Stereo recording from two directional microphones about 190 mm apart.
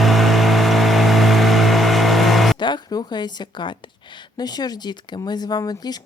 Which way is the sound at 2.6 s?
25° left (ahead or behind).